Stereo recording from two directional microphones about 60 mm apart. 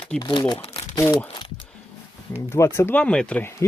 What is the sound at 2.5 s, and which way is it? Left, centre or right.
Speech, left.